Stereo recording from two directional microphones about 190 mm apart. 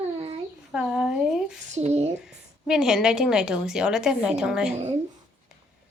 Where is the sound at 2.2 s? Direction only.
5° right (ahead or behind).